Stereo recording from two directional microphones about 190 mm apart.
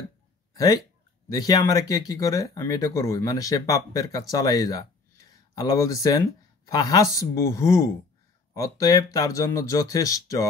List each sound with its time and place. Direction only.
0.6 s speech: 20° left (ahead or behind)